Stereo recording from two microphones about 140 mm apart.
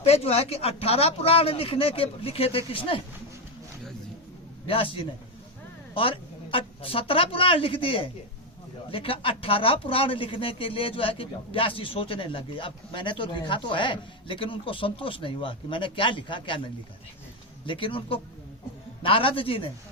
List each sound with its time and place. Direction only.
0.0 s speech: 45° left (ahead or behind)
4.6 s a woman's voice: 40° left (ahead or behind)
17.7 s speech: 40° left (ahead or behind)